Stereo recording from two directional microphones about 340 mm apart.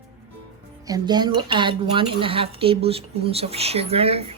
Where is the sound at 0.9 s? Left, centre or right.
Centre.